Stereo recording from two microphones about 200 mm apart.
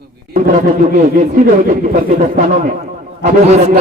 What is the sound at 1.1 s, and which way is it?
A man's voice, 40° right (ahead or behind).